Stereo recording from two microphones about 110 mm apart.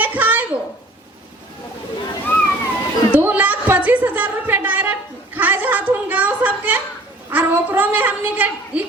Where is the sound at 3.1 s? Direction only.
15° right (ahead or behind).